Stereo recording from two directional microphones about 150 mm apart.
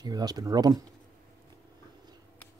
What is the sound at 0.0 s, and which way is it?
Speech, 25° right (ahead or behind).